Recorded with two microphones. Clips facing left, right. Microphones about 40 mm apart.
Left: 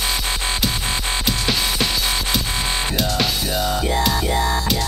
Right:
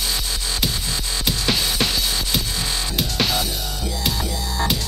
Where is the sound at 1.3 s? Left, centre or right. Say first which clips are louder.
Right 1 dB; centre.